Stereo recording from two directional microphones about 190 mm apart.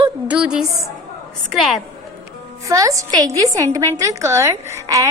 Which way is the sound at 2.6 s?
15° right (ahead or behind).